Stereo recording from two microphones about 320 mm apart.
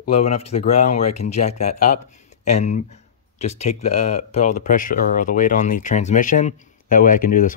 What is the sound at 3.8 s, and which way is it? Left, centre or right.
Speech, left.